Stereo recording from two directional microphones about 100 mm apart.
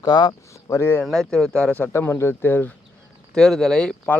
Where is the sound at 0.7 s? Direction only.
25° left (ahead or behind).